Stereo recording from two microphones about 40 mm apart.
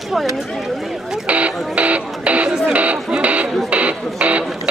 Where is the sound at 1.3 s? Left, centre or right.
Right.